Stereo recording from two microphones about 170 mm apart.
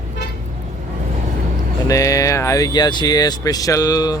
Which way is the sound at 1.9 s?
20° left (ahead or behind).